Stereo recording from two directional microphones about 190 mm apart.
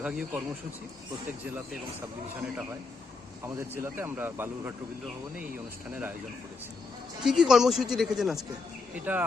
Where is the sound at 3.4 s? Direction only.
15° right (ahead or behind).